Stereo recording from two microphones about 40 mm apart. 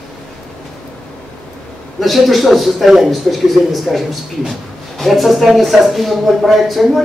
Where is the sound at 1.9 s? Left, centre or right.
Centre.